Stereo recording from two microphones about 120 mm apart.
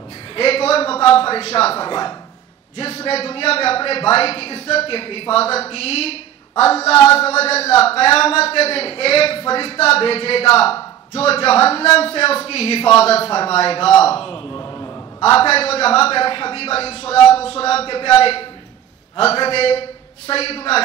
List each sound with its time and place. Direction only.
0.4 s a man's voice: 55° left (ahead or behind)
1.9 s speech: 40° left (ahead or behind)
2.8 s a man's voice: 55° left (ahead or behind)
14.6 s a sound: 25° left (ahead or behind)
15.2 s a man's voice: 55° left (ahead or behind)